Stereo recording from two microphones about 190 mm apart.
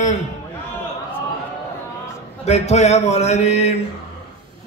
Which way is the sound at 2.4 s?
35° left (ahead or behind).